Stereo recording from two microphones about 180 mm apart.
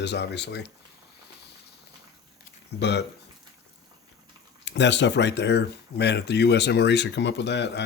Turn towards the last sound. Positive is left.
turn(degrees=75)  # may be behind; listen again after turning